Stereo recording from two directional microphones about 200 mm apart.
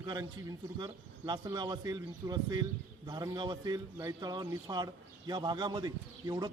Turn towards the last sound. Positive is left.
turn(degrees=-20)  # may be behind; listen again after turning